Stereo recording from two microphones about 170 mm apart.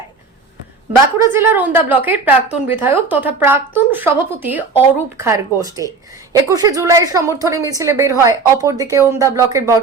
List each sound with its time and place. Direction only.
1.3 s a woman's voice: 10° right (ahead or behind)